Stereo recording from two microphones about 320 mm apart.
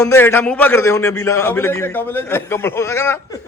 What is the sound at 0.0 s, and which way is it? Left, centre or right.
A man's voice, centre.